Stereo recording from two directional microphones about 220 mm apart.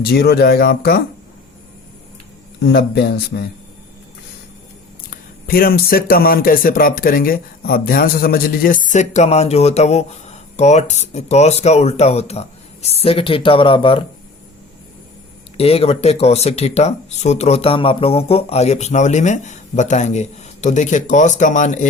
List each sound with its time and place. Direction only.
0.0 s speech: 45° left (ahead or behind)
2.6 s speech: 50° left (ahead or behind)
5.1 s speech: 40° left (ahead or behind); by 14.0 s 25° left (ahead or behind)
15.5 s speech: 25° left (ahead or behind)